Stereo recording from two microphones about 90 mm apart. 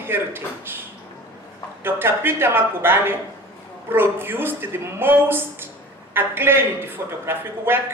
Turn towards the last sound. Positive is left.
turn(degrees=-25)  # may be behind; listen again after turning